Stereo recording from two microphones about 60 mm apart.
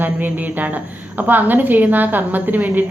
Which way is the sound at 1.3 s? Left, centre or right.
Right.